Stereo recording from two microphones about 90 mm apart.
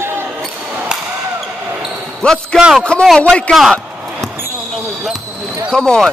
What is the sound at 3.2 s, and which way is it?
Speech, 10° left (ahead or behind).